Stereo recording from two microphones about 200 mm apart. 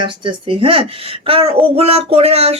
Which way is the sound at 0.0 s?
25° right (ahead or behind).